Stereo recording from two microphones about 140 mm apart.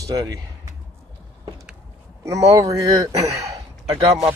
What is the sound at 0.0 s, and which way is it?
Speech, 25° right (ahead or behind).